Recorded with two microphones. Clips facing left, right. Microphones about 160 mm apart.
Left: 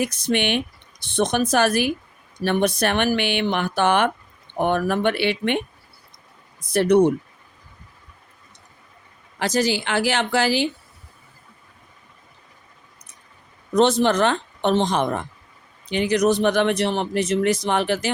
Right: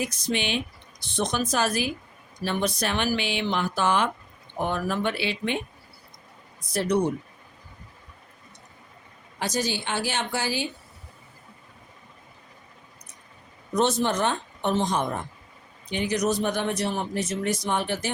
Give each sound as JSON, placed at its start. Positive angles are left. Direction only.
{"t": 0.0, "sound": "speech", "side_deg": 65}
{"t": 6.7, "sound": "speech", "side_deg": 65}
{"t": 9.4, "sound": "speech", "side_deg": 90}
{"t": 13.7, "sound": "speech", "side_deg": 90}